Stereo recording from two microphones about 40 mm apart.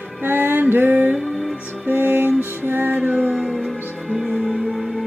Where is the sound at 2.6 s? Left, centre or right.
Right.